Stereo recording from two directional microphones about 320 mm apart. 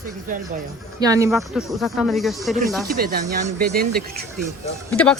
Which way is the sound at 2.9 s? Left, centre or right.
Right.